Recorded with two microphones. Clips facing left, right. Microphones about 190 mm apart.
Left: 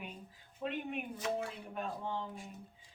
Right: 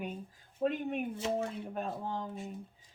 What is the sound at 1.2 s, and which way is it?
Speech, 25° right (ahead or behind).